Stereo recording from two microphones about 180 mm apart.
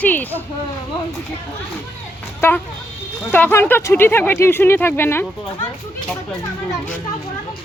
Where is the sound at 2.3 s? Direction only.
10° left (ahead or behind).